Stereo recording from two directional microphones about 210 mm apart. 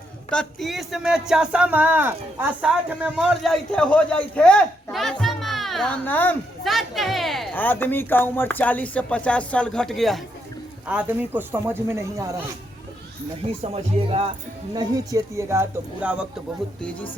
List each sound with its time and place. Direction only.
0.3 s speech: 5° left (ahead or behind); by 12.4 s 15° right (ahead or behind)
13.6 s speech: 30° right (ahead or behind)
14.8 s speech: 15° right (ahead or behind)